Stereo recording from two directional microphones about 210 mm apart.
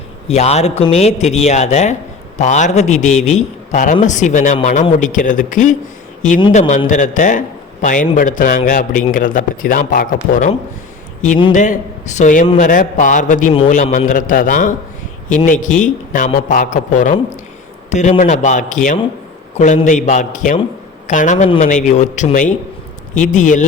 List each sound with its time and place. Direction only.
0.3 s a man's voice: 30° left (ahead or behind)
11.5 s a man's voice: 35° left (ahead or behind)